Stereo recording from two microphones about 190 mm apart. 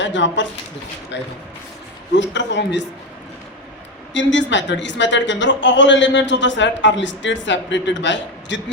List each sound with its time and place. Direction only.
0.0 s a man's voice: 75° left (ahead or behind)
4.1 s a man's voice: 75° left (ahead or behind)